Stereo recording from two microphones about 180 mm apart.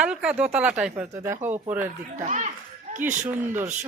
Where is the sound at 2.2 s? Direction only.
40° right (ahead or behind).